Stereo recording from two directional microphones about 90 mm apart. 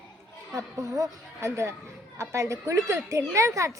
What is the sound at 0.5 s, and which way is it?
Speech, 40° right (ahead or behind).